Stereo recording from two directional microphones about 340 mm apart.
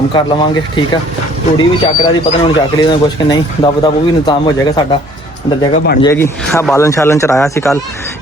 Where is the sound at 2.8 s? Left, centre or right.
Centre.